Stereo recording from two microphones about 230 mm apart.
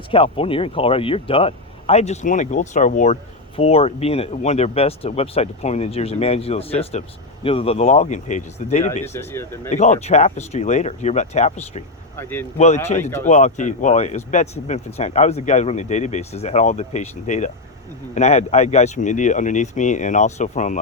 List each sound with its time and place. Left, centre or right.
0.1 s speech: left
9.0 s speech: centre
9.6 s speech: left
12.1 s speech: centre
12.5 s speech: left
13.0 s speech: centre
13.2 s speech: left